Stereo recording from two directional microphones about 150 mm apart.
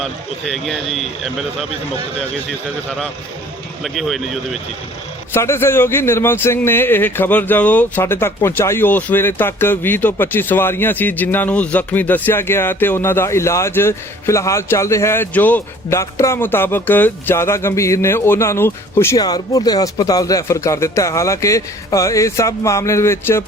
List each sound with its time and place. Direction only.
0.0 s a man's voice: centre (ahead or behind)
3.8 s a man's voice: centre (ahead or behind)
5.3 s a man's voice: 15° left (ahead or behind)